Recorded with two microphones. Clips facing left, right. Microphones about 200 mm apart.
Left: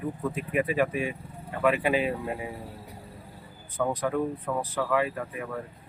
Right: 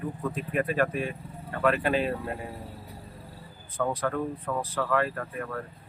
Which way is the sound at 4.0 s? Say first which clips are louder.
Left 2 dB; 15° left (ahead or behind).